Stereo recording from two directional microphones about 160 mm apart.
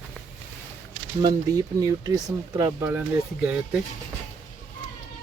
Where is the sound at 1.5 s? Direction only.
20° right (ahead or behind).